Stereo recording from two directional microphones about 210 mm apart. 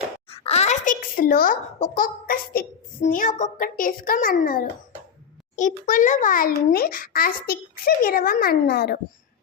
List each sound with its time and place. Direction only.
0.3 s a child's voice: 30° left (ahead or behind)
5.8 s a child's voice: 40° left (ahead or behind)